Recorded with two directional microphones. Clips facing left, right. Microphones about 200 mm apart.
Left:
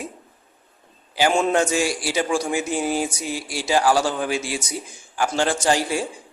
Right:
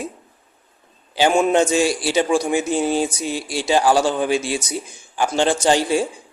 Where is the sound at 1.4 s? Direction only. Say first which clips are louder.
Right 6 dB; 20° right (ahead or behind).